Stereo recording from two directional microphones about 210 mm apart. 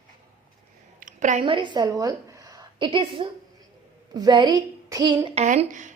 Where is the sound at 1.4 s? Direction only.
25° right (ahead or behind).